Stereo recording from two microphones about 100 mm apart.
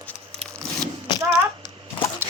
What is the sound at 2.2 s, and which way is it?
Clip-clop, 25° right (ahead or behind).